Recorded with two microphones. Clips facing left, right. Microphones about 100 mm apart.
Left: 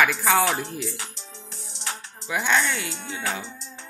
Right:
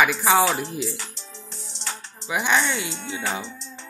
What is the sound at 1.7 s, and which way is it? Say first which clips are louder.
Music: left 1 dB; 5° left (ahead or behind).